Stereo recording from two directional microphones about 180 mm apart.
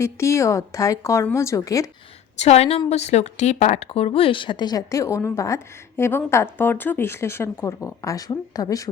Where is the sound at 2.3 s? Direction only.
40° left (ahead or behind).